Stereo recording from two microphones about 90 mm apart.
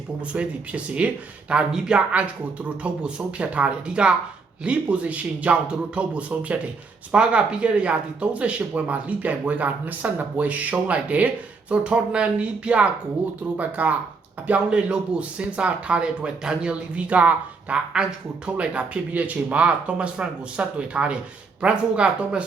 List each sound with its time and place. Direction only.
0.3 s speech: 15° right (ahead or behind)